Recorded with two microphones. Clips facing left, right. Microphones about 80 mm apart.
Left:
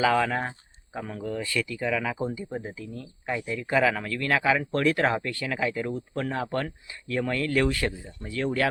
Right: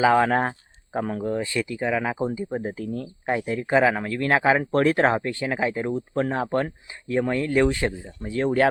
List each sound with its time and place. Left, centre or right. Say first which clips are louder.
0.0 s speech: right 4 dB; right
0.3 s speech: right 7 dB; right
2.7 s speech: right 8 dB; right
3.2 s speech: right 5 dB; right